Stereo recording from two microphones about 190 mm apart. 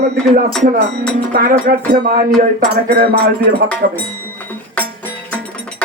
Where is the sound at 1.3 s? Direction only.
50° right (ahead or behind).